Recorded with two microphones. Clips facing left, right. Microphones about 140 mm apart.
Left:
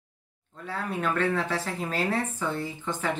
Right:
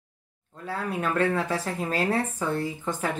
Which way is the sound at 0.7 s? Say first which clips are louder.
Right 1 dB; 45° right (ahead or behind).